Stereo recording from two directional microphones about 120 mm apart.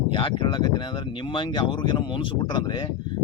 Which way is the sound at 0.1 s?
45° left (ahead or behind).